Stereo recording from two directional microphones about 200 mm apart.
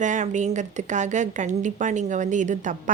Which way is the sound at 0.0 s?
40° right (ahead or behind).